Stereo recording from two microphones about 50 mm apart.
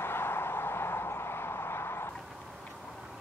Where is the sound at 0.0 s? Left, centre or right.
Left.